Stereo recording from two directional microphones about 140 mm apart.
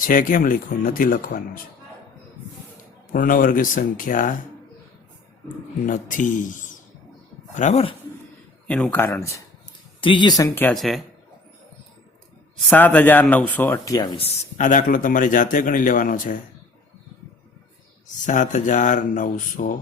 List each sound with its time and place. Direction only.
0.0 s a man's voice: 75° left (ahead or behind)
3.1 s a man's voice: 80° left
5.8 s a man's voice: 70° left (ahead or behind)
7.5 s speech: 55° left (ahead or behind)
8.6 s speech: 5° left (ahead or behind)
10.0 s speech: 35° left (ahead or behind); by 10.8 s 15° left (ahead or behind)
10.8 s speech: centre (ahead or behind)
12.7 s speech: 10° left (ahead or behind)
14.6 s a man's voice: 65° left (ahead or behind)
18.3 s speech: 65° left (ahead or behind)